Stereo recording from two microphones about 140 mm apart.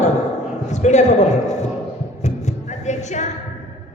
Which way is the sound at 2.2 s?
55° left (ahead or behind).